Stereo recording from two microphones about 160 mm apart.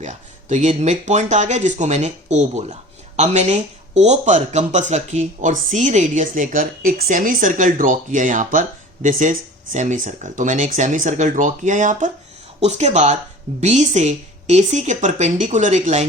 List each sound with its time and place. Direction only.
0.0 s speech: 50° right (ahead or behind)